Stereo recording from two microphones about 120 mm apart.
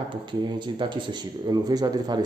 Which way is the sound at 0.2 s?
40° right (ahead or behind).